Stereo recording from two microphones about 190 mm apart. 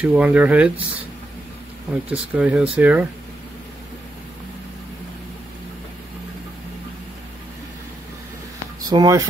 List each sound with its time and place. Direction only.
0.0 s speech: 5° right (ahead or behind)
2.0 s speech: 5° right (ahead or behind)
8.8 s speech: 20° right (ahead or behind)